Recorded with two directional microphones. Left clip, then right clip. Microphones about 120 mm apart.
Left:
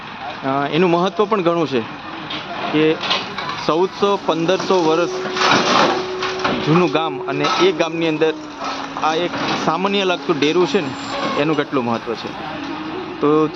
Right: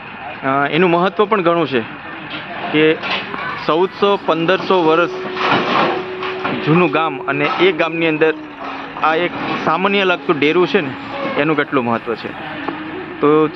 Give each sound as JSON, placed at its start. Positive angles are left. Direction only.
{"t": 0.4, "sound": "speech", "side_deg": 5}
{"t": 5.4, "sound": "a sound", "side_deg": -40}
{"t": 6.7, "sound": "speech", "side_deg": 15}
{"t": 13.2, "sound": "speech", "side_deg": 10}